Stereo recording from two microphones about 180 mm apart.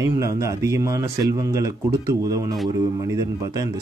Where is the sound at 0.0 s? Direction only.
15° right (ahead or behind).